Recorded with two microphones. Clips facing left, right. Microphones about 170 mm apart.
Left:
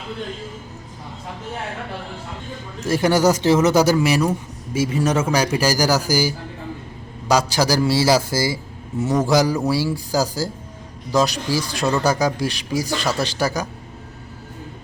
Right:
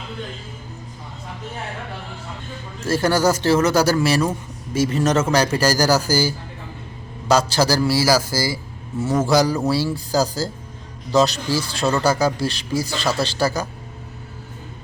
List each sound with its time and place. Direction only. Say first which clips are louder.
2.8 s a man's voice: left 1 dB; 15° left (ahead or behind)
9.2 s a man's voice: right 1 dB; 15° left (ahead or behind)